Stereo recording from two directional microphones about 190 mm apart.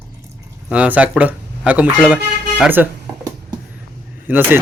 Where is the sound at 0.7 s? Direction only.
5° right (ahead or behind).